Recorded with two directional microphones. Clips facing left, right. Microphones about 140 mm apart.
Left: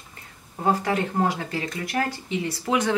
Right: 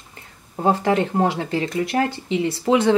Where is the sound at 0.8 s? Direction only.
30° right (ahead or behind).